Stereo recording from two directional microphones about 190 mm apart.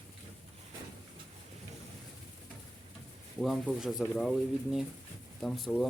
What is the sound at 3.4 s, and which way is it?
Speech, centre (ahead or behind).